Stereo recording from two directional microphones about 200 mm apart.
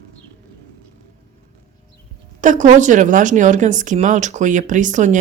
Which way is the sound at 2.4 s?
40° right (ahead or behind).